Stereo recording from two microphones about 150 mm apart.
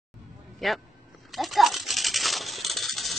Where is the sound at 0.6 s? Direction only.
Centre (ahead or behind).